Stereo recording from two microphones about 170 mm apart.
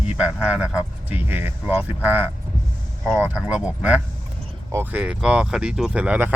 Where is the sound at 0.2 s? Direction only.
5° right (ahead or behind).